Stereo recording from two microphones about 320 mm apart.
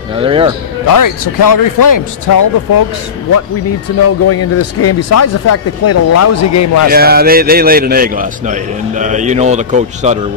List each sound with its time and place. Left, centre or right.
0.2 s a man's voice: centre
0.9 s speech: left
4.0 s speech: left
6.8 s a man's voice: right